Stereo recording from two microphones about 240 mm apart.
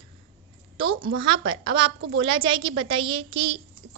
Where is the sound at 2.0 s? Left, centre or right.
Right.